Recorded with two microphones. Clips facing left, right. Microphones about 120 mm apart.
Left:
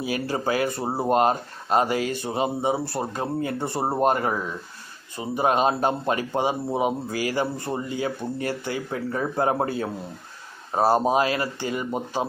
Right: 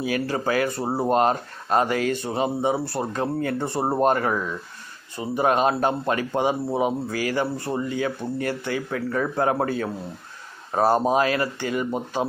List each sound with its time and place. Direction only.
0.5 s speech: 20° left (ahead or behind)
4.1 s speech: 25° left (ahead or behind)
7.9 s speech: 35° left (ahead or behind)